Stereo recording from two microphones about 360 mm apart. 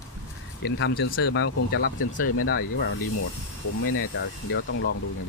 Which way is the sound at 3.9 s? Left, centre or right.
Left.